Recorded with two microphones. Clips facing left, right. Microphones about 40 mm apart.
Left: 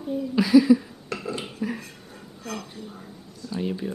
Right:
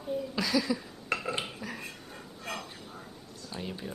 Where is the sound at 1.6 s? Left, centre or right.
Centre.